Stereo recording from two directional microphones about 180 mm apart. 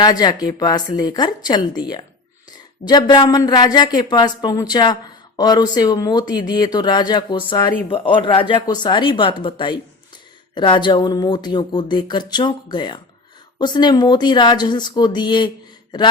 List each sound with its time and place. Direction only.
0.0 s speech: 20° left (ahead or behind)